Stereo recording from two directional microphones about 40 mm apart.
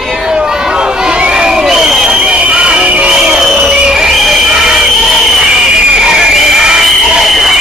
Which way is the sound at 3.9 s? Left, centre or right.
Centre.